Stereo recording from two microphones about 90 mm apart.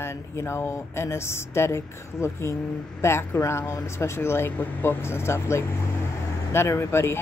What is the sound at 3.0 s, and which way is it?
Speech, 30° left (ahead or behind).